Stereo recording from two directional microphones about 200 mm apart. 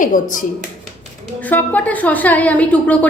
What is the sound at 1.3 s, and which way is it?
A woman's voice, 10° left (ahead or behind).